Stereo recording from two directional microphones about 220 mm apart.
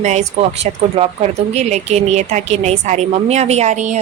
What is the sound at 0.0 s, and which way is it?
A woman's voice, 30° right (ahead or behind).